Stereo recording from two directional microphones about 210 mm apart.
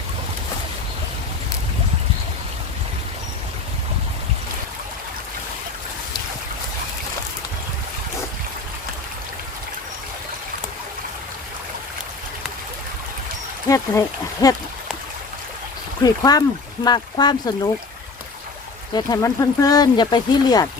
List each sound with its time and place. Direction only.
13.7 s speech: 15° left (ahead or behind)
16.0 s speech: 20° left (ahead or behind)
18.9 s speech: 20° left (ahead or behind)